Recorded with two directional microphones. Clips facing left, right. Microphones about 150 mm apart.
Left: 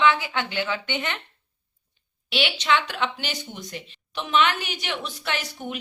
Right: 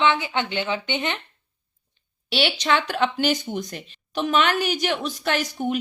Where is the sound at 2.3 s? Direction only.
40° right (ahead or behind).